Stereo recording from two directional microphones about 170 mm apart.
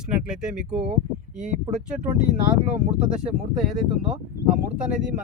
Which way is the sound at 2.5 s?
10° right (ahead or behind).